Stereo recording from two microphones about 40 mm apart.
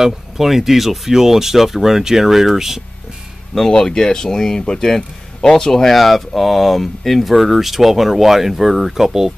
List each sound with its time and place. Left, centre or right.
0.0 s speech: centre
3.7 s speech: centre
5.9 s speech: centre